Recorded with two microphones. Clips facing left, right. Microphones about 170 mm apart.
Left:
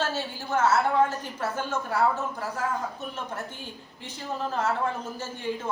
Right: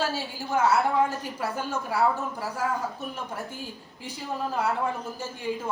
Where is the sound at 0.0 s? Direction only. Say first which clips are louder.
Even; 10° right (ahead or behind).